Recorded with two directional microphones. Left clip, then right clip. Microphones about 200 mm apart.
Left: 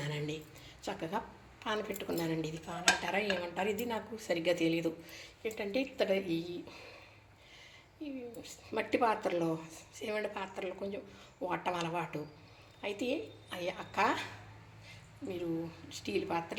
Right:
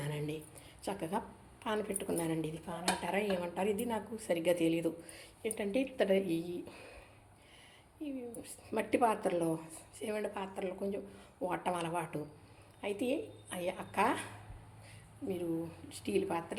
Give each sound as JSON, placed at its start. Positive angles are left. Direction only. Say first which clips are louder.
{"t": 0.0, "sound": "a sound", "louder": "left 1 dB", "side_deg": -5}
{"t": 0.9, "sound": "speech", "louder": "even", "side_deg": -10}
{"t": 8.0, "sound": "speech", "louder": "right 1 dB", "side_deg": -15}
{"t": 15.3, "sound": "speech", "louder": "even", "side_deg": -15}